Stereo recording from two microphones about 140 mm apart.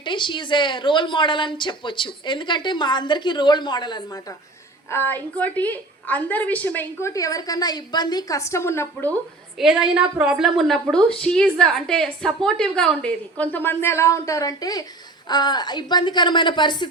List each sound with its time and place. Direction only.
0.0 s a woman's voice: 35° left (ahead or behind)
4.9 s a woman's voice: 15° left (ahead or behind)
9.6 s a woman's voice: 5° right (ahead or behind); by 16.9 s 35° left (ahead or behind)